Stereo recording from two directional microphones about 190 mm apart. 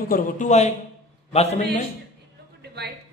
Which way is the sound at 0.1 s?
40° left (ahead or behind).